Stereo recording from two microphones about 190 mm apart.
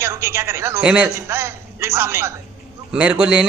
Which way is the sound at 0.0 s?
15° right (ahead or behind).